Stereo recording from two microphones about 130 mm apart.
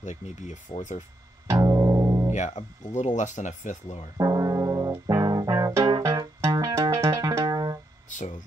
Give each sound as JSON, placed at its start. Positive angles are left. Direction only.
{"t": 0.0, "sound": "speech", "side_deg": 65}
{"t": 1.5, "sound": "music", "side_deg": -25}
{"t": 2.3, "sound": "speech", "side_deg": 65}
{"t": 4.2, "sound": "music", "side_deg": -25}
{"t": 8.1, "sound": "a sound", "side_deg": 75}